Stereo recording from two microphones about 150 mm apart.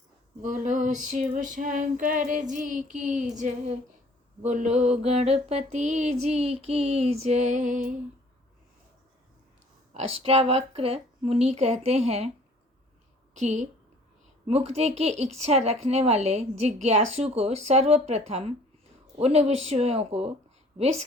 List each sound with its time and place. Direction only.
0.4 s female singing: 60° right (ahead or behind)
4.4 s mantra: 50° right (ahead or behind)
9.9 s mantra: 45° right (ahead or behind)
13.3 s mantra: 50° right (ahead or behind)